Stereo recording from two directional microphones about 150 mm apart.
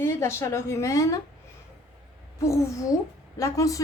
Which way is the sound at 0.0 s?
15° left (ahead or behind).